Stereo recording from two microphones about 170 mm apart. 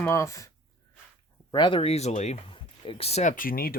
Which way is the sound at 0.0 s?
20° left (ahead or behind).